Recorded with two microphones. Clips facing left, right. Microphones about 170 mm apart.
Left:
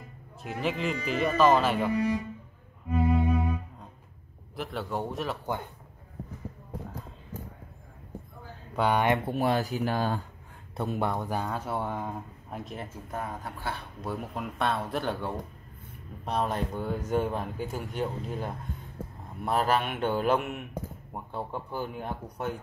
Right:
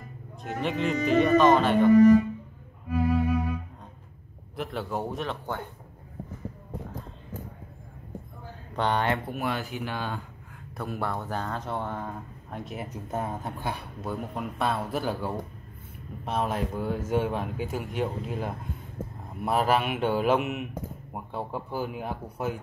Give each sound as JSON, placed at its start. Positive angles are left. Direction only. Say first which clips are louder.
{"t": 0.4, "sound": "speech", "louder": "right 2 dB", "side_deg": 5}
{"t": 0.9, "sound": "speech", "louder": "right 9 dB", "side_deg": -40}
{"t": 1.2, "sound": "speech", "louder": "right 1 dB", "side_deg": 5}
{"t": 2.9, "sound": "cello", "louder": "right 1 dB", "side_deg": 20}
{"t": 4.6, "sound": "speech", "louder": "right 1 dB", "side_deg": 0}
{"t": 8.7, "sound": "speech", "louder": "left 1 dB", "side_deg": 10}
{"t": 9.3, "sound": "speech", "louder": "left 4 dB", "side_deg": 35}
{"t": 10.8, "sound": "speech", "louder": "left 2 dB", "side_deg": 20}
{"t": 12.9, "sound": "speech", "louder": "right 6 dB", "side_deg": -25}
{"t": 14.0, "sound": "speech", "louder": "right 2 dB", "side_deg": 0}